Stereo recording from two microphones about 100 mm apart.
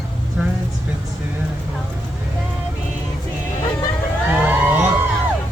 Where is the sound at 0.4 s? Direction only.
10° right (ahead or behind).